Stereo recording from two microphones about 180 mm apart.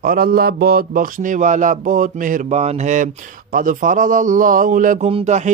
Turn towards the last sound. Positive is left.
turn(degrees=-40)  # may be behind; listen again after turning